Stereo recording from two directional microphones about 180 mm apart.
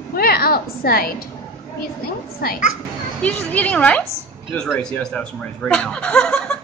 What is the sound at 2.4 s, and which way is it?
Speech, 55° left (ahead or behind).